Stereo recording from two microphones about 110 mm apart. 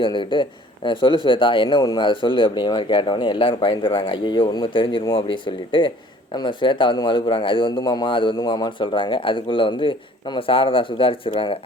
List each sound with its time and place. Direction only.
0.0 s speech: 50° left (ahead or behind)